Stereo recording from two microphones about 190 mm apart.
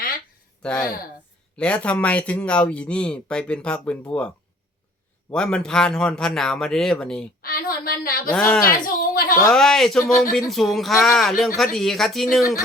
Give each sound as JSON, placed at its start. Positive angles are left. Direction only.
{"t": 0.6, "sound": "speech", "side_deg": 5}
{"t": 5.3, "sound": "speech", "side_deg": 5}
{"t": 7.4, "sound": "a woman's voice", "side_deg": 50}
{"t": 8.3, "sound": "speech", "side_deg": 5}
{"t": 8.6, "sound": "a woman's voice", "side_deg": 50}
{"t": 9.5, "sound": "speech", "side_deg": 0}